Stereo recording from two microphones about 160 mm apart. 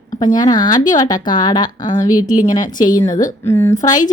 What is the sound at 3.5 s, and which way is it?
Speech, 15° left (ahead or behind).